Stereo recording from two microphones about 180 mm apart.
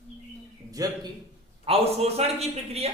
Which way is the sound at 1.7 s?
35° right (ahead or behind).